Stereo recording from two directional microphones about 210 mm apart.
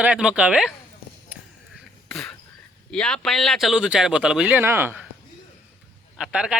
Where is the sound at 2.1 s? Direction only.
5° left (ahead or behind).